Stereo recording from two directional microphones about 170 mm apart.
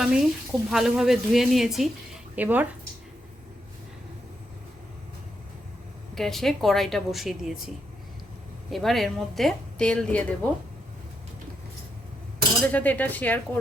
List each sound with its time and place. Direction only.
0.0 s a woman's voice: 5° right (ahead or behind)
6.1 s a woman's voice: centre (ahead or behind)
8.7 s a woman's voice: centre (ahead or behind)
12.6 s speech: 10° left (ahead or behind)